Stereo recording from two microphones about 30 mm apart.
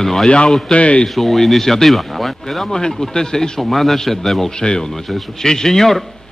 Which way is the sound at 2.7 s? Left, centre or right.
Left.